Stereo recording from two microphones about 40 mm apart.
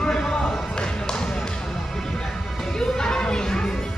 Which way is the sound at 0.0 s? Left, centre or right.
Centre.